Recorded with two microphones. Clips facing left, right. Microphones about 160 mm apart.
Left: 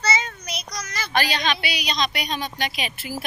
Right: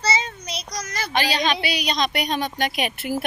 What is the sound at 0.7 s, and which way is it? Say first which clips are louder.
A child's voice: even; 50° right (ahead or behind).